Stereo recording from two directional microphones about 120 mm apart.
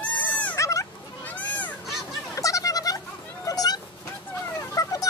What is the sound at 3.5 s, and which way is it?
Dog, 30° left (ahead or behind).